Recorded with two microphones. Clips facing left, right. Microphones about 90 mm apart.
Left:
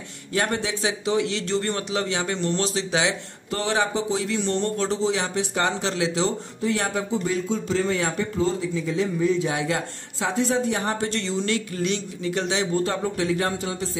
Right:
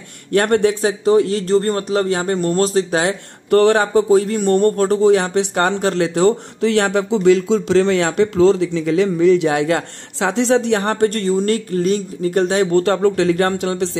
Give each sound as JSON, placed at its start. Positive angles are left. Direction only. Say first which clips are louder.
{"t": 0.3, "sound": "speech", "louder": "right 11 dB", "side_deg": -60}